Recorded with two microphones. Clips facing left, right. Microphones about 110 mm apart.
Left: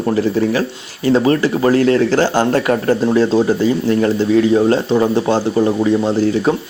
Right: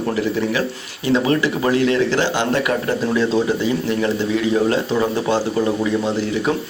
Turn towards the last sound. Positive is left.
turn(degrees=30)  # may be behind; listen again after turning